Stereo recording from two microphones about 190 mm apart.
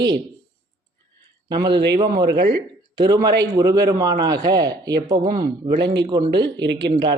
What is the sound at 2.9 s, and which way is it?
Speech, 20° right (ahead or behind).